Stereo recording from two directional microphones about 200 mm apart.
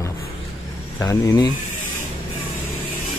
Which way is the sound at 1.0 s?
15° left (ahead or behind).